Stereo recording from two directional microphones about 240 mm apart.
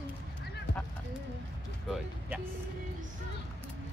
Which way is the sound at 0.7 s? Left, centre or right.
Left.